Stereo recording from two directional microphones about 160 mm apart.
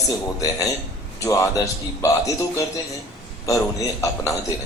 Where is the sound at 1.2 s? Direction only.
20° left (ahead or behind).